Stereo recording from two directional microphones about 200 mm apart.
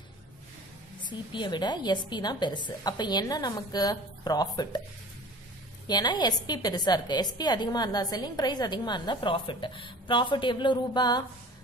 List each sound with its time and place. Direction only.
1.3 s a woman's voice: 20° left (ahead or behind)
5.9 s a woman's voice: 20° left (ahead or behind)